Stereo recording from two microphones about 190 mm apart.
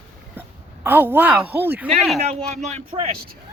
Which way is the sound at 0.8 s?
10° right (ahead or behind).